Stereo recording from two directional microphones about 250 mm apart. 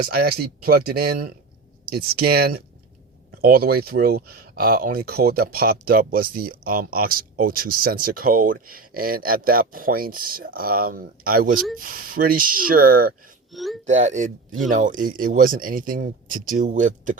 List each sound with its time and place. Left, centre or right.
0.0 s speech: right
13.5 s speech: centre
13.8 s speech: right